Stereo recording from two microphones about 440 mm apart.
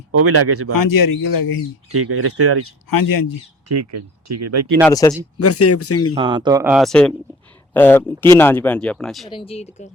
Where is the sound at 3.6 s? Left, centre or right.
Right.